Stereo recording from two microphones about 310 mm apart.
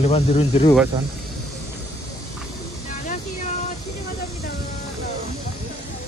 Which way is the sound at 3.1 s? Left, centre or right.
Left.